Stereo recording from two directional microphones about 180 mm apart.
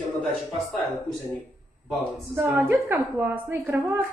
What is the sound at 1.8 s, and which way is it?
A woman's voice, 10° right (ahead or behind).